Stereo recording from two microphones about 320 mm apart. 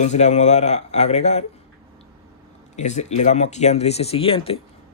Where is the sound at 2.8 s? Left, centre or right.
Left.